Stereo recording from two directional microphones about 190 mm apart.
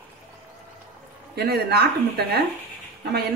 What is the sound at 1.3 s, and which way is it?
Speech, 60° right (ahead or behind).